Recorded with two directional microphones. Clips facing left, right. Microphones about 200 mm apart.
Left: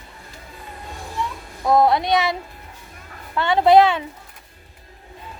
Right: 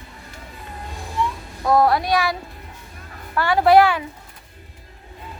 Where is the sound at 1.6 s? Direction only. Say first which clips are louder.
Left 1 dB; 20° left (ahead or behind).